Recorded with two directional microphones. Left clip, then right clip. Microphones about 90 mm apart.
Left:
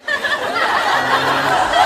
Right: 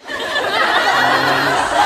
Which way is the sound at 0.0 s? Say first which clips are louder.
Left 1 dB; centre (ahead or behind).